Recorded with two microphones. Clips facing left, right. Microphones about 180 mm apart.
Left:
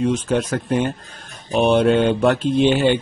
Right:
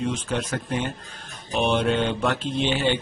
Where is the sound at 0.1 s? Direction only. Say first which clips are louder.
Left 7 dB; 45° left (ahead or behind).